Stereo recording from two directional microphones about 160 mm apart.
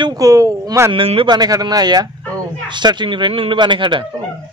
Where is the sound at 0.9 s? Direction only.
35° right (ahead or behind).